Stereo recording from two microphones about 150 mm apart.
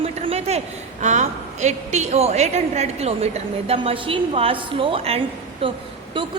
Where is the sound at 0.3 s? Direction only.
45° right (ahead or behind).